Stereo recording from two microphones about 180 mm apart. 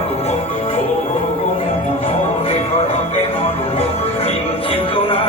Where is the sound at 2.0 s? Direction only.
30° left (ahead or behind).